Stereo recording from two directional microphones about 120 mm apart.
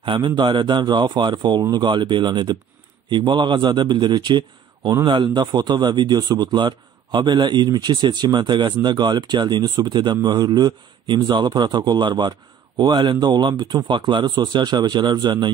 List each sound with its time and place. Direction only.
0.0 s speech: 40° right (ahead or behind)